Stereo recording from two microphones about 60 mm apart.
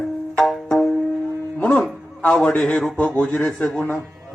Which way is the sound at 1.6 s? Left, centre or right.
Centre.